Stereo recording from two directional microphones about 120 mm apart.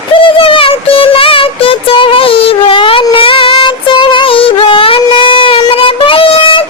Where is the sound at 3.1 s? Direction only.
45° left (ahead or behind).